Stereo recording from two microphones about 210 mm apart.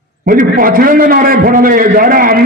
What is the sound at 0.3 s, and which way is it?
A man's voice, 40° right (ahead or behind).